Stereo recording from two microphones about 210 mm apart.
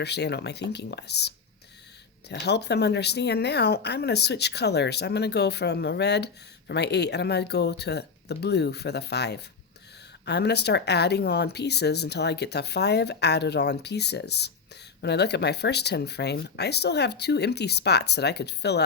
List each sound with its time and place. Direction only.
0.0 s speech: 55° left (ahead or behind)
2.3 s speech: 55° left (ahead or behind)